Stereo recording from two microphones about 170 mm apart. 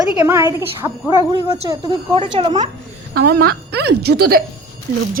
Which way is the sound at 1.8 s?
30° right (ahead or behind).